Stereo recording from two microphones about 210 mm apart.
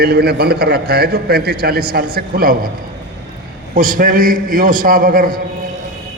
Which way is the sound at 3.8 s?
40° right (ahead or behind).